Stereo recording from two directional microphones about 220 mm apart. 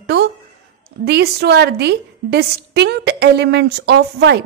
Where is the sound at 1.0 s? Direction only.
50° right (ahead or behind).